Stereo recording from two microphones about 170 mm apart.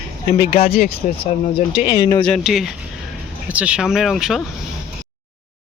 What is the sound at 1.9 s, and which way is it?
Speech, 25° left (ahead or behind).